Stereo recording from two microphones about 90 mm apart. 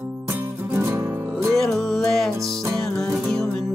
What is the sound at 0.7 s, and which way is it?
Music, 30° right (ahead or behind).